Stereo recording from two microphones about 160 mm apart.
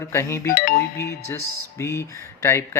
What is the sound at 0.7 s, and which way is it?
Speech, 15° left (ahead or behind).